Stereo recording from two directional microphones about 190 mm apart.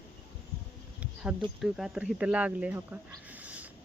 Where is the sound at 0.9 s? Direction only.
5° right (ahead or behind).